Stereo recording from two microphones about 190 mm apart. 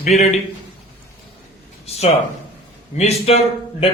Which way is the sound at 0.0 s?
35° left (ahead or behind).